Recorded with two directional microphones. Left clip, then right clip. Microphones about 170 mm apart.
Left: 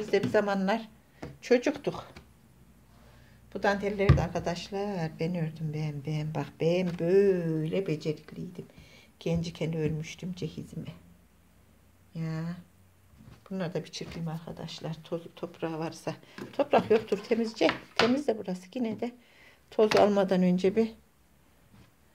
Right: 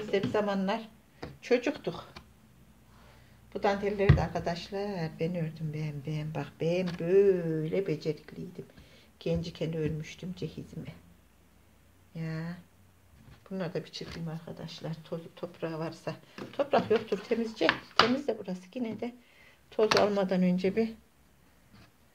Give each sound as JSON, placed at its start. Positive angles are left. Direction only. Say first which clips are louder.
{"t": 0.1, "sound": "speech", "louder": "left 3 dB", "side_deg": 35}
{"t": 3.5, "sound": "a woman's voice", "louder": "left 1 dB", "side_deg": 25}
{"t": 12.1, "sound": "a woman's voice", "louder": "left 1 dB", "side_deg": 10}